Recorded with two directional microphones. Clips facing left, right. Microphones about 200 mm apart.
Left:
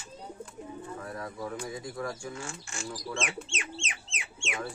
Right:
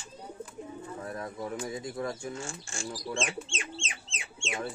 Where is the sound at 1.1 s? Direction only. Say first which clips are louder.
Right 1 dB; 25° right (ahead or behind).